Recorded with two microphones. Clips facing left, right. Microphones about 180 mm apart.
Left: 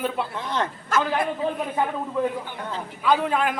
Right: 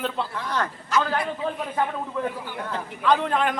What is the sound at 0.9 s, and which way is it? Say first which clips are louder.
Speech: left 1 dB; 50° left (ahead or behind).